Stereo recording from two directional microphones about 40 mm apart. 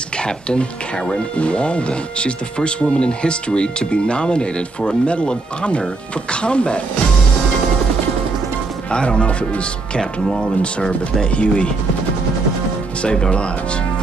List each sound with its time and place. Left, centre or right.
0.2 s speech: left
8.9 s speech: left
13.0 s speech: left